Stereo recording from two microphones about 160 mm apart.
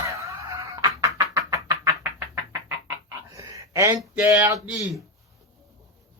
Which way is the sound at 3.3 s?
20° right (ahead or behind).